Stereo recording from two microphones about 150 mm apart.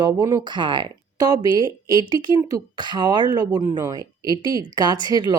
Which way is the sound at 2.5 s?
30° right (ahead or behind).